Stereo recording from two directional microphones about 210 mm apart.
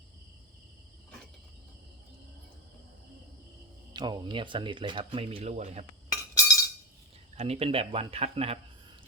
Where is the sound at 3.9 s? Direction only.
20° right (ahead or behind).